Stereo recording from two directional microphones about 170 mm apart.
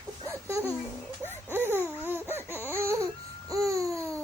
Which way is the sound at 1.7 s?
15° right (ahead or behind).